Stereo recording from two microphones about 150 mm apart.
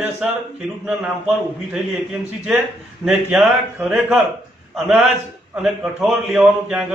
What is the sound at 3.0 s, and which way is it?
A man's voice, 5° right (ahead or behind).